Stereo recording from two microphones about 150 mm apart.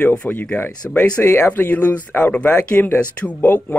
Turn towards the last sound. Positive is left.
turn(degrees=10)  # may be behind; listen again after turning